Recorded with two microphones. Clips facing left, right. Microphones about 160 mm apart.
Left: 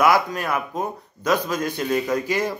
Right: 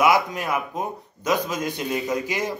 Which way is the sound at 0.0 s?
20° right (ahead or behind).